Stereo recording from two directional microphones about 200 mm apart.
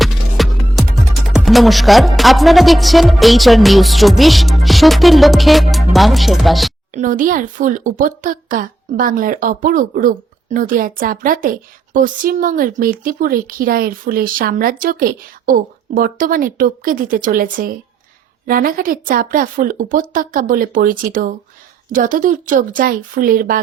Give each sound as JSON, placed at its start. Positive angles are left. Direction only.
{"t": 0.0, "sound": "music", "side_deg": 0}
{"t": 1.3, "sound": "speech", "side_deg": 0}
{"t": 6.9, "sound": "speech", "side_deg": -40}